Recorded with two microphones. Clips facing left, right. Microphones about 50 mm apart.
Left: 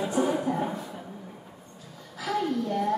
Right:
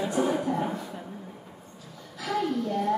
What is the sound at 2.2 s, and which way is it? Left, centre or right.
Speech, centre.